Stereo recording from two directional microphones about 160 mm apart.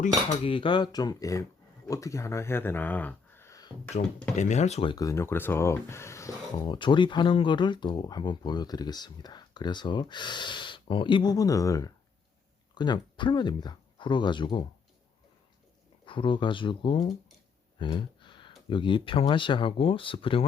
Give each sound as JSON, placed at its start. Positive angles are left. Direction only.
{"t": 0.4, "sound": "speech", "side_deg": 30}
{"t": 4.0, "sound": "speech", "side_deg": 60}
{"t": 4.4, "sound": "speech", "side_deg": 45}
{"t": 4.9, "sound": "speech", "side_deg": 20}
{"t": 16.0, "sound": "speech", "side_deg": 30}
{"t": 17.7, "sound": "a sound", "side_deg": 30}
{"t": 18.7, "sound": "speech", "side_deg": 30}